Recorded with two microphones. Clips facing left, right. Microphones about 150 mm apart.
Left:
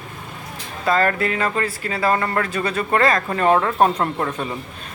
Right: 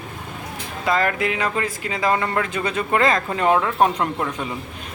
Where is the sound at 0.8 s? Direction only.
10° right (ahead or behind).